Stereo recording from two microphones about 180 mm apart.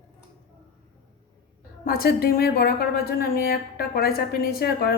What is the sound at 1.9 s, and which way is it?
A woman's voice, 55° left (ahead or behind).